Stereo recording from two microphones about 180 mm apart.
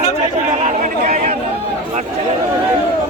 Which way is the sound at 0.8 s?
40° right (ahead or behind).